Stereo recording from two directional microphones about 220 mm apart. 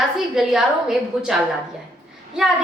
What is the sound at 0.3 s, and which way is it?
A woman's voice, centre (ahead or behind).